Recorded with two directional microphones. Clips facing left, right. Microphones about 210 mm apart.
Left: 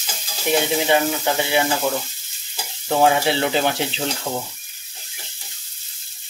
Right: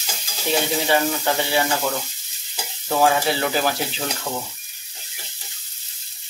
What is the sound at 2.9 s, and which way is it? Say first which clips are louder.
Speech: left 2 dB; 20° left (ahead or behind).